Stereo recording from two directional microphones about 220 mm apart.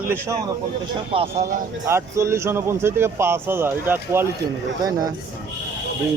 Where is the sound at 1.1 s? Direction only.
25° right (ahead or behind).